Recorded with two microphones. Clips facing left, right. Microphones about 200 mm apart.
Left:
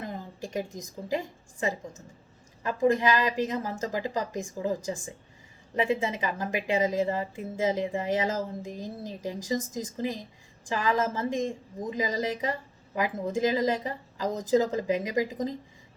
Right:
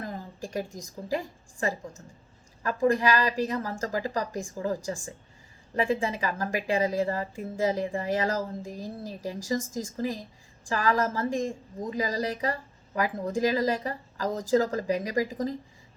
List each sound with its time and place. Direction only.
0.0 s a woman's voice: 20° left (ahead or behind)